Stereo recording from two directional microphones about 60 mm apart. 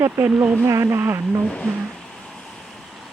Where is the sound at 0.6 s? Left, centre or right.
Right.